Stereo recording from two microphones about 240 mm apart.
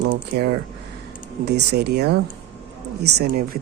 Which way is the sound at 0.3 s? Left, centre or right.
Right.